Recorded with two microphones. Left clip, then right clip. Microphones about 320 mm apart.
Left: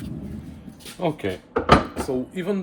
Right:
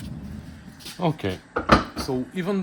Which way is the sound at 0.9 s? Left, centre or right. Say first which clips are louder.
Left 1 dB; right.